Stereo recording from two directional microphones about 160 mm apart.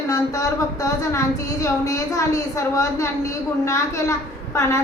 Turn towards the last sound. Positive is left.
turn(degrees=20)  # may be behind; listen again after turning